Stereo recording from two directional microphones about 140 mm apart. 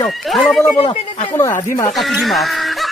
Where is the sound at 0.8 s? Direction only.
45° left (ahead or behind).